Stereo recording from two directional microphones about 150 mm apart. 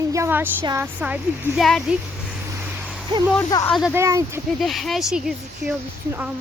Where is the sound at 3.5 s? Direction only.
25° left (ahead or behind).